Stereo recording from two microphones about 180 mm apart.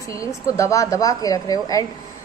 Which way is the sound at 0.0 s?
15° left (ahead or behind).